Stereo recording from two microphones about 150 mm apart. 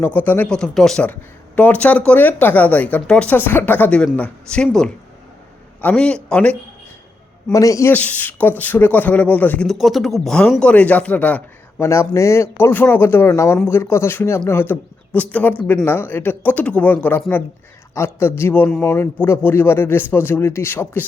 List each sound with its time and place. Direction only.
0.0 s speech: 10° left (ahead or behind)
7.5 s speech: 20° left (ahead or behind)